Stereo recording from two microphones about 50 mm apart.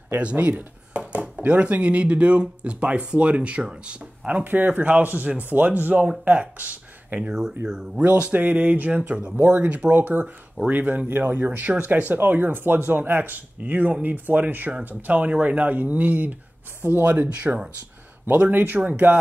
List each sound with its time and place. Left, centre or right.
0.2 s a sound: right
1.4 s speech: right
7.6 s speech: centre
8.2 s speech: right